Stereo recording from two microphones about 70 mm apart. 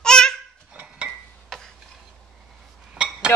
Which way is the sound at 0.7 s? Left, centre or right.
Centre.